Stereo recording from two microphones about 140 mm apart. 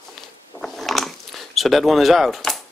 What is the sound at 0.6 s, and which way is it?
Mechanisms, centre (ahead or behind).